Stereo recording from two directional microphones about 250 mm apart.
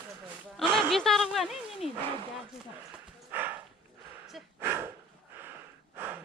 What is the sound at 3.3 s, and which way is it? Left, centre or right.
Dog, centre.